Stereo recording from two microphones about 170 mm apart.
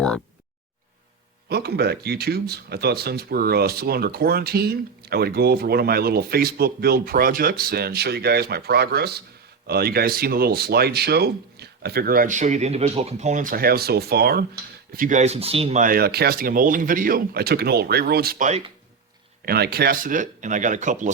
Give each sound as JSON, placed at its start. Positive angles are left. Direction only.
{"t": 1.5, "sound": "speech", "side_deg": -70}
{"t": 14.9, "sound": "speech", "side_deg": -50}
{"t": 15.8, "sound": "speech", "side_deg": -60}
{"t": 19.5, "sound": "speech", "side_deg": -70}